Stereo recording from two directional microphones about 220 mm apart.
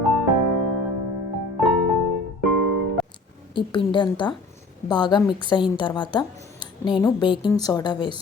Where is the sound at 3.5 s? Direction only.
20° left (ahead or behind).